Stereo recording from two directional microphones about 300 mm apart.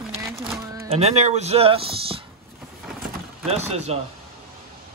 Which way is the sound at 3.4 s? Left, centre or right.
Right.